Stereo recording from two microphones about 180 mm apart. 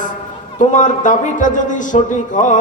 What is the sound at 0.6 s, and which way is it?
Speech, 45° left (ahead or behind).